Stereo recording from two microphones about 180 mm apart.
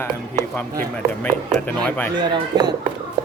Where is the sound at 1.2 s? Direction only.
10° left (ahead or behind).